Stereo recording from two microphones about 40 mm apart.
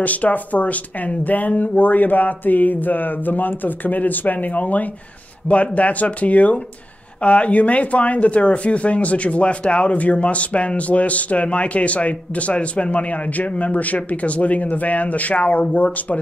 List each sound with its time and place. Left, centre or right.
0.0 s speech: left